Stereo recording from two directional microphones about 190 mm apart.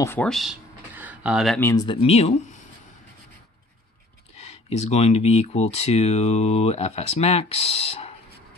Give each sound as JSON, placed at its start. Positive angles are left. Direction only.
{"t": 0.0, "sound": "speech", "side_deg": 10}
{"t": 0.3, "sound": "a sound", "side_deg": 0}
{"t": 1.6, "sound": "speech", "side_deg": 15}
{"t": 1.9, "sound": "speech", "side_deg": 30}
{"t": 4.4, "sound": "speech", "side_deg": 35}